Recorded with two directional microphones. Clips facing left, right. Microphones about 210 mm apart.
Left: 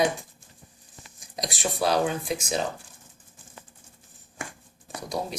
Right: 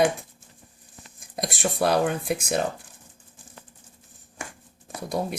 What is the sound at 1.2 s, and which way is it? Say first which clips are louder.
Speech: right 3 dB; 55° right (ahead or behind).